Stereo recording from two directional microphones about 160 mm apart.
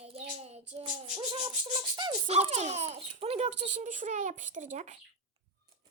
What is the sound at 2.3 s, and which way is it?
A child's voice, 45° right (ahead or behind).